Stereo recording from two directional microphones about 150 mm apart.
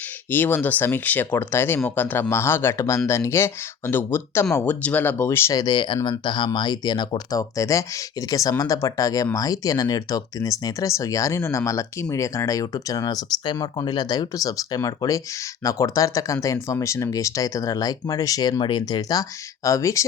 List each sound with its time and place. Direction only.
0.3 s speech: 10° left (ahead or behind)